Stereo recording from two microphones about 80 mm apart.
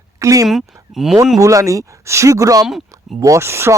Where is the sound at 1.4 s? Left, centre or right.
Right.